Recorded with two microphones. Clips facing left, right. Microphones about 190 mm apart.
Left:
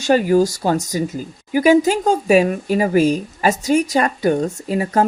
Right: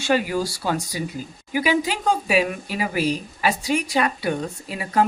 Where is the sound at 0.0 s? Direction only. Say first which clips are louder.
Left 8 dB; 45° left (ahead or behind).